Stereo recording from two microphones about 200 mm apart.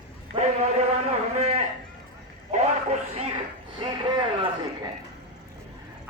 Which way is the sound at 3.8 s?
25° right (ahead or behind).